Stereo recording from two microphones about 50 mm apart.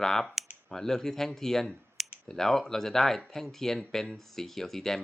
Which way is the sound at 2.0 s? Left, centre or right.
Centre.